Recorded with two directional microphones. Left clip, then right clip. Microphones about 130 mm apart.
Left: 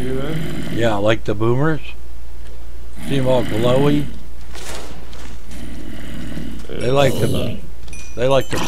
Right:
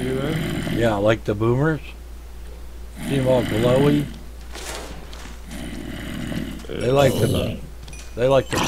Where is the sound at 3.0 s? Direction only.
Centre (ahead or behind).